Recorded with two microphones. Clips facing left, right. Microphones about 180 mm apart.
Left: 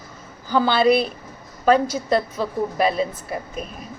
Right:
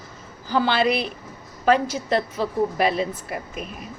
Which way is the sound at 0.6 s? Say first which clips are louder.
Left 4 dB; 35° left (ahead or behind).